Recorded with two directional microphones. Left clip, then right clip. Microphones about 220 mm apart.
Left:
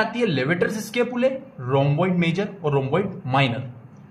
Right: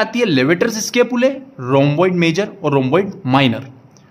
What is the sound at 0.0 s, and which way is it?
Speech, 50° right (ahead or behind).